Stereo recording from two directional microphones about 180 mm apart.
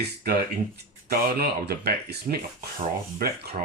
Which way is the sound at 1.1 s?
60° right (ahead or behind).